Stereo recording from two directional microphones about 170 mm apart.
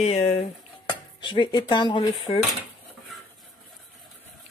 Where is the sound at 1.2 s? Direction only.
30° left (ahead or behind).